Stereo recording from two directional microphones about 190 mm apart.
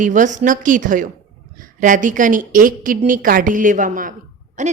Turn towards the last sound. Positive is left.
turn(degrees=-40)  # may be behind; listen again after turning